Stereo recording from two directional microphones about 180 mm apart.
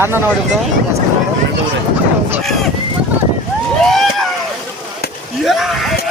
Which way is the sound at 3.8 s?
Centre (ahead or behind).